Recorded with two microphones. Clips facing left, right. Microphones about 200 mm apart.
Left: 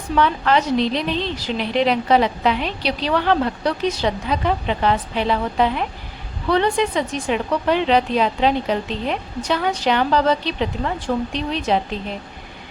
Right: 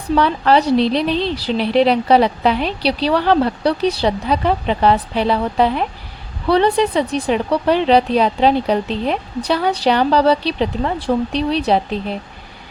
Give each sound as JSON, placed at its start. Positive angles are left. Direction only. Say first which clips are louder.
{"t": 0.2, "sound": "a woman's voice", "louder": "right 2 dB", "side_deg": -35}